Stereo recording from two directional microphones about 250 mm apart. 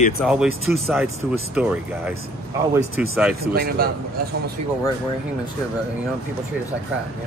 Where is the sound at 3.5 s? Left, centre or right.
Right.